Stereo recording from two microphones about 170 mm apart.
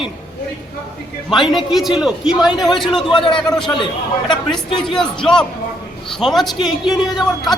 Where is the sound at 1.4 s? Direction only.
Centre (ahead or behind).